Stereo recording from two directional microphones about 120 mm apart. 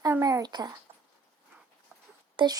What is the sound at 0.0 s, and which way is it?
Speech, 30° right (ahead or behind).